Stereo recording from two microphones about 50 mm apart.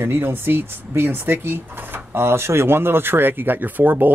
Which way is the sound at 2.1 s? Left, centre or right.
Right.